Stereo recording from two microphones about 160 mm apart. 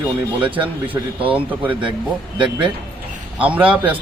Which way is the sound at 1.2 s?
10° right (ahead or behind).